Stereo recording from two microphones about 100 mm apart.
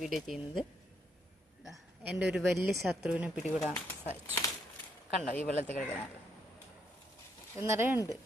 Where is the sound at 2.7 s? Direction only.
Centre (ahead or behind).